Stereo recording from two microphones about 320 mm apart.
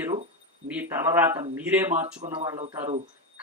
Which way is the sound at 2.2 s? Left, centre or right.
Centre.